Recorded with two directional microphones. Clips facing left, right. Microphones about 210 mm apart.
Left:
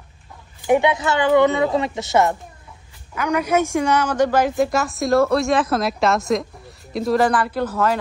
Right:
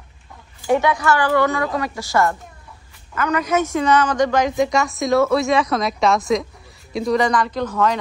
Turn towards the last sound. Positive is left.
turn(degrees=5)  # may be behind; listen again after turning